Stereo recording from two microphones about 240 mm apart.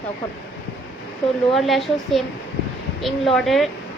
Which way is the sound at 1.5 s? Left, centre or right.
Centre.